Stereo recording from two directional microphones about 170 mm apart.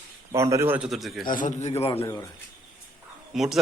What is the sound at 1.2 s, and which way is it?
Speech, 50° left (ahead or behind).